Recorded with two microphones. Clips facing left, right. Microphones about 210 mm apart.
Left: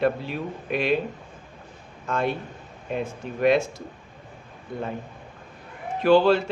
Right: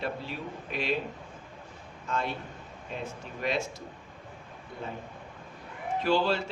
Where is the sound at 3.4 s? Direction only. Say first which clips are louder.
Left 11 dB; 55° left (ahead or behind).